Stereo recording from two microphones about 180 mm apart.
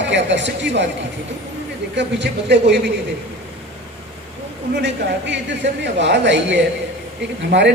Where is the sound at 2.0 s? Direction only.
75° right (ahead or behind).